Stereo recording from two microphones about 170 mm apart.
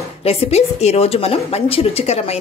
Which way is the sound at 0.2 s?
35° left (ahead or behind).